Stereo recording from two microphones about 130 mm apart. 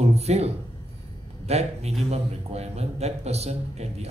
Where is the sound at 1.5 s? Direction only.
55° right (ahead or behind).